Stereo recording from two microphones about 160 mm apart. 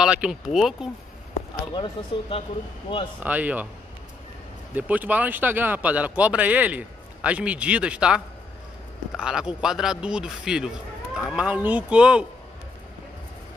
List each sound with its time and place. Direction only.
0.0 s speech: 5° right (ahead or behind)
1.7 s speech: 30° left (ahead or behind)
3.2 s speech: 10° right (ahead or behind)
4.7 s speech: 10° right (ahead or behind)